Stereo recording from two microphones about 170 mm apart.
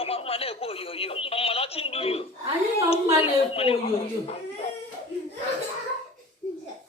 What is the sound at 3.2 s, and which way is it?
Speech, 35° left (ahead or behind).